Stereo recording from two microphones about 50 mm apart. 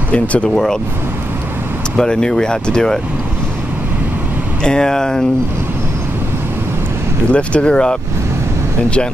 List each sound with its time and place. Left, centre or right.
0.1 s speech: left
2.0 s speech: centre
4.6 s speech: centre
7.2 s speech: left